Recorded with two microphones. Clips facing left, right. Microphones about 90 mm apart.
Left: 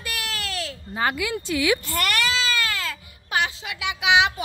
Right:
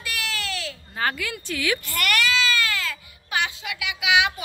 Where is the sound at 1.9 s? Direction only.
30° left (ahead or behind).